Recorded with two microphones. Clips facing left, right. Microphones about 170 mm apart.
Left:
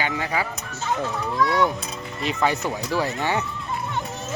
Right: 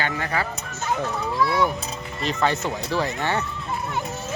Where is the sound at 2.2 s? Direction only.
10° left (ahead or behind).